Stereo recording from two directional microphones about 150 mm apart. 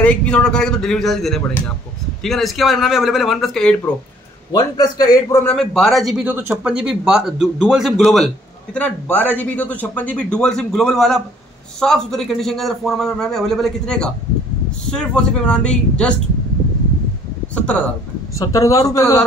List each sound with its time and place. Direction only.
0.0 s speech: 10° left (ahead or behind)
4.5 s a man's voice: 25° left (ahead or behind)
5.4 s a man's voice: 5° left (ahead or behind)
18.4 s a man's voice: 20° left (ahead or behind)